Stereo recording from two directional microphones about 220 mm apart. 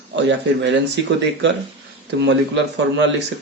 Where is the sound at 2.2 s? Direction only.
50° right (ahead or behind).